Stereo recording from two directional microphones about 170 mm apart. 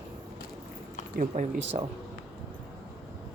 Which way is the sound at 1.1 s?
45° right (ahead or behind).